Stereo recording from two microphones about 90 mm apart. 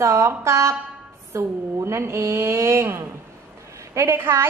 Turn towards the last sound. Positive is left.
turn(degrees=-30)  # may be behind; listen again after turning